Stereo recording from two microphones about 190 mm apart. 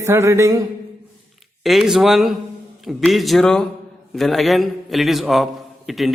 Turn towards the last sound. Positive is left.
turn(degrees=0)  # may be behind; listen again after turning